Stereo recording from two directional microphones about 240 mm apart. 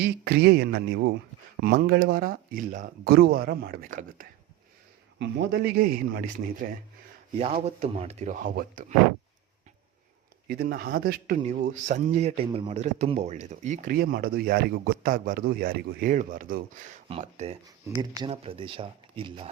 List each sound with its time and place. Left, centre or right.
0.0 s speech: right
7.3 s speech: right
10.5 s speech: right
17.8 s speech: centre